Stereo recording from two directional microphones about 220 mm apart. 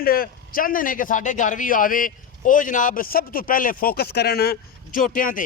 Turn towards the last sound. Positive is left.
turn(degrees=40)  # may be behind; listen again after turning